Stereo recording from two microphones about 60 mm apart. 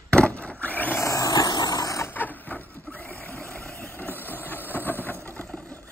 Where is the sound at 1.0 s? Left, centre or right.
Left.